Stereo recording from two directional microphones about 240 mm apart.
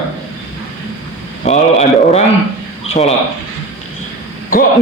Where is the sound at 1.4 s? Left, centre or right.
Left.